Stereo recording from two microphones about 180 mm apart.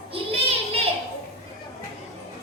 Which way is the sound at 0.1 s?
30° right (ahead or behind).